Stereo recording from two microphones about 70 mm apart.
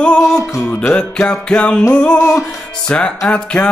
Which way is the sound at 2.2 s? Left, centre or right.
Left.